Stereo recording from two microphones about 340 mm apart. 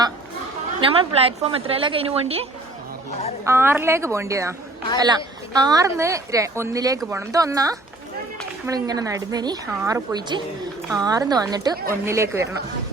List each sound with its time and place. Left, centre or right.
0.8 s speech: centre